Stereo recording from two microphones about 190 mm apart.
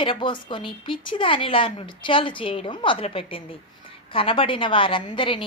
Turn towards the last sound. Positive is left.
turn(degrees=25)  # may be behind; listen again after turning